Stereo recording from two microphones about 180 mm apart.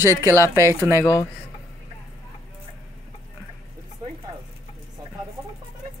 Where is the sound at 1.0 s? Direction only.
20° left (ahead or behind).